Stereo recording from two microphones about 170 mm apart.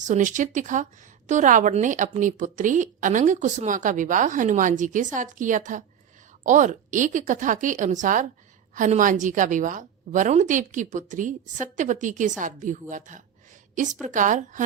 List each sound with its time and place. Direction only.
0.1 s a woman's voice: 50° right (ahead or behind)